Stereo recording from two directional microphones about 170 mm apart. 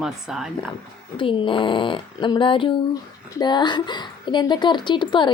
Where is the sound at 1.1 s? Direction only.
30° left (ahead or behind).